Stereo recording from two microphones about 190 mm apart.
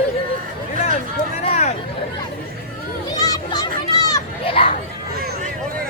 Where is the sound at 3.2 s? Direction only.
20° left (ahead or behind).